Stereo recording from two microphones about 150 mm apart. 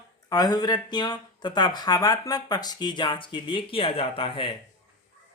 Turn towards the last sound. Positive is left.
turn(degrees=35)  # may be behind; listen again after turning